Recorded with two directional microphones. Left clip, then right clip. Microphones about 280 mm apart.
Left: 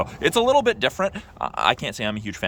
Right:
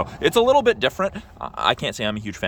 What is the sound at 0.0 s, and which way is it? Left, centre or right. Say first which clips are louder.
Speech: right 2 dB; centre.